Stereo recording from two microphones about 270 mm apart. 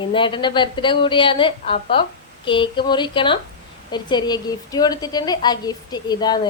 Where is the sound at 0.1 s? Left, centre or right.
Centre.